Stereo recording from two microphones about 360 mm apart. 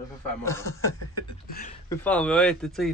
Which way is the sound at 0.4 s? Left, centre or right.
Centre.